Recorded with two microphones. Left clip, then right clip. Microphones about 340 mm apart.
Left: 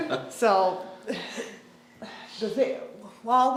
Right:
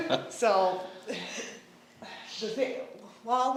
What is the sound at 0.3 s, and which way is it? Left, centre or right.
Speech, left.